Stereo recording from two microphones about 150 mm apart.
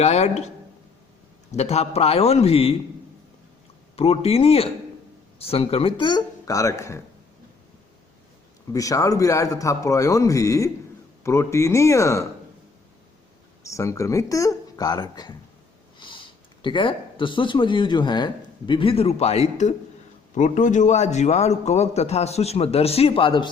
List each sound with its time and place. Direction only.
0.0 s a man's voice: 45° left (ahead or behind)
3.9 s a man's voice: 40° left (ahead or behind); by 7.0 s 20° left (ahead or behind)
8.7 s a man's voice: 20° left (ahead or behind)
13.7 s a man's voice: 20° left (ahead or behind)
16.0 s sniff: 30° left (ahead or behind)
16.6 s a man's voice: 35° left (ahead or behind)